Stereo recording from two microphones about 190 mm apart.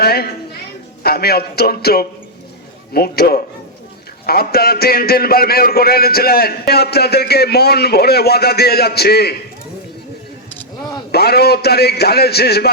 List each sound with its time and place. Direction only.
0.0 s a woman's voice: 55° left (ahead or behind)
11.1 s a man's voice: 55° left (ahead or behind)